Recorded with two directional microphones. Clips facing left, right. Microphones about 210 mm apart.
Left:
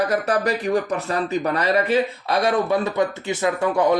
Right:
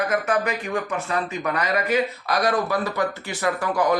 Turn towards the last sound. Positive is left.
turn(degrees=25)  # may be behind; listen again after turning